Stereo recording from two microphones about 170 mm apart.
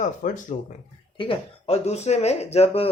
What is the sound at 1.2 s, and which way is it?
Speech, 30° left (ahead or behind).